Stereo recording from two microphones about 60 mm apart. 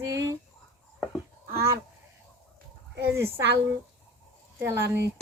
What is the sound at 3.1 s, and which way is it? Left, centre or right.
Speech, right.